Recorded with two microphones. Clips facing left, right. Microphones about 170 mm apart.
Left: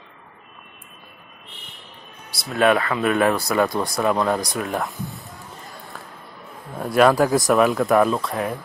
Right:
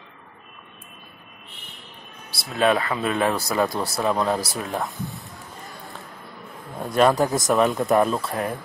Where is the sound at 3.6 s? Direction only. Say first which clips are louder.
Left 2 dB; 5° right (ahead or behind).